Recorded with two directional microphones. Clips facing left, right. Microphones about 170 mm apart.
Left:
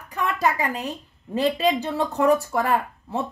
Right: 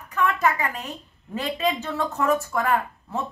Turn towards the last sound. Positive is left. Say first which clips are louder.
# left 1 dB
turn(degrees=35)  # may be behind; listen again after turning